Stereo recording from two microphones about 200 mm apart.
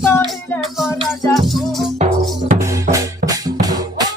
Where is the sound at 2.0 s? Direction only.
35° right (ahead or behind).